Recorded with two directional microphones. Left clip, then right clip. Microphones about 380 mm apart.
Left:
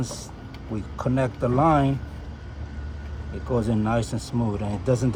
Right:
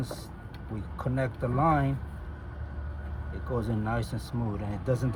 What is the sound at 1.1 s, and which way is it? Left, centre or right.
Speech, left.